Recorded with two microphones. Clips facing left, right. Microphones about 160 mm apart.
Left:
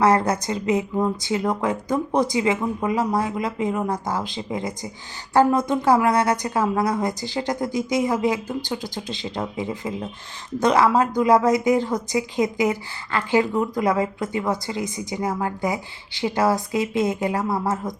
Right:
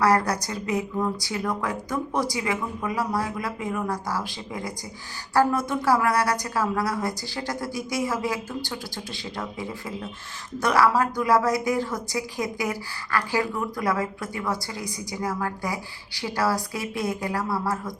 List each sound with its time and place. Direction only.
0.0 s a woman's voice: 20° left (ahead or behind)